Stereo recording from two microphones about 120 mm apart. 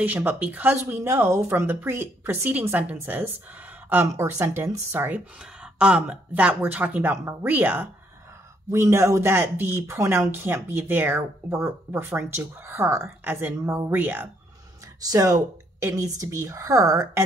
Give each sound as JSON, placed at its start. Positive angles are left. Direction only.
{"t": 0.0, "sound": "speech", "side_deg": -15}
{"t": 5.4, "sound": "speech", "side_deg": -10}
{"t": 8.7, "sound": "speech", "side_deg": -25}
{"t": 15.0, "sound": "speech", "side_deg": -30}